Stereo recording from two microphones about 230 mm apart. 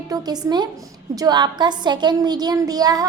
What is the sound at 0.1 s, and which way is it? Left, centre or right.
A woman's voice, centre.